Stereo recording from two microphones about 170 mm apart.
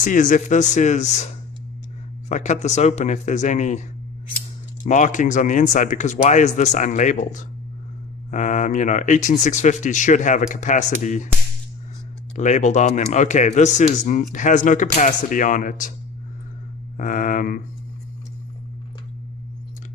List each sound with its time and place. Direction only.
0.0 s speech: 50° left (ahead or behind)
2.3 s speech: 45° left (ahead or behind)
4.9 s speech: 50° left (ahead or behind)
12.4 s speech: 45° left (ahead or behind)
17.0 s speech: 50° left (ahead or behind)